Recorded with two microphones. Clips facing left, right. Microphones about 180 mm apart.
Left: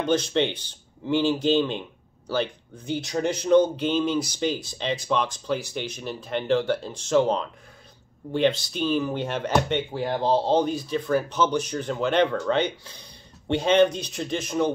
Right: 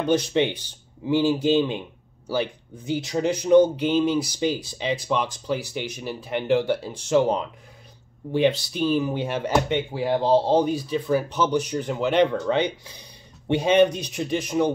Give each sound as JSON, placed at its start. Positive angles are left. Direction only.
{"t": 0.0, "sound": "speech", "side_deg": -15}